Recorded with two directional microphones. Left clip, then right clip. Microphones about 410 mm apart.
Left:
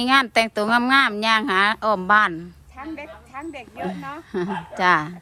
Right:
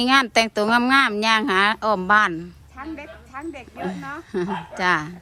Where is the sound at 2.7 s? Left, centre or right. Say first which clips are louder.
Even; left.